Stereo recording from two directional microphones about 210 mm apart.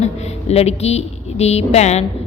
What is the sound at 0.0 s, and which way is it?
Speech, 30° left (ahead or behind).